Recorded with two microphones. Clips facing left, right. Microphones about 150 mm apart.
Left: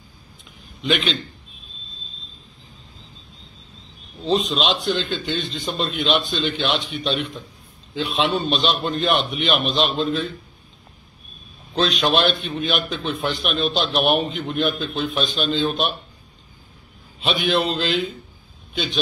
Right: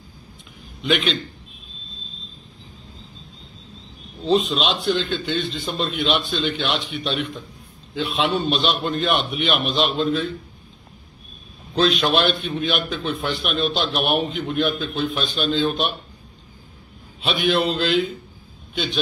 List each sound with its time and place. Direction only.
0.8 s a man's voice: centre (ahead or behind)
4.2 s a man's voice: 5° right (ahead or behind)
11.7 s a man's voice: centre (ahead or behind)
17.2 s a man's voice: centre (ahead or behind)